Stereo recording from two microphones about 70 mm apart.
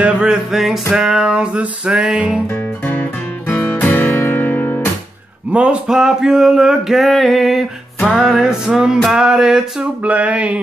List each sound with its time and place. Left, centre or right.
0.0 s music: centre
2.4 s guitar: left
5.5 s music: centre